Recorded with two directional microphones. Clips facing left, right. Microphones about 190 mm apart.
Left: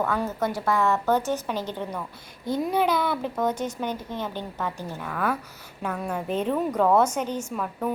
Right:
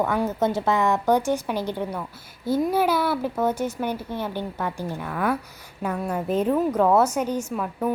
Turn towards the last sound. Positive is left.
turn(degrees=-5)  # may be behind; listen again after turning